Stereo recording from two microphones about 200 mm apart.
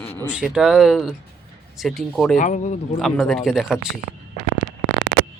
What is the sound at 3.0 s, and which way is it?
Speech, centre (ahead or behind).